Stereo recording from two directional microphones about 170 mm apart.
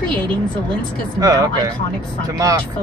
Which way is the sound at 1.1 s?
20° right (ahead or behind).